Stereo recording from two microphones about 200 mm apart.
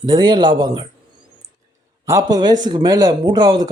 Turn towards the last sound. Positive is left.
turn(degrees=-20)  # may be behind; listen again after turning